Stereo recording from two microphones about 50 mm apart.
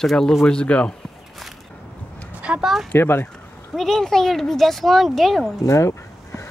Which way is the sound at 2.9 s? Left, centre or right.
Left.